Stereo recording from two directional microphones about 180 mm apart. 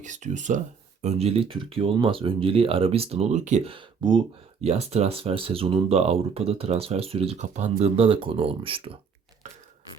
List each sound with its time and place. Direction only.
0.0 s speech: 40° right (ahead or behind)